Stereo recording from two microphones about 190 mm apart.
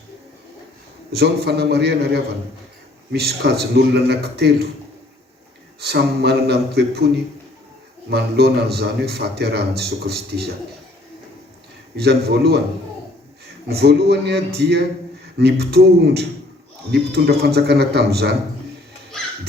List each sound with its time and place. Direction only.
1.1 s a man's voice: 60° right (ahead or behind)
5.8 s a man's voice: 60° right (ahead or behind)
8.1 s a man's voice: 60° right (ahead or behind)
11.9 s a man's voice: 55° right (ahead or behind)
13.7 s a man's voice: 55° right (ahead or behind)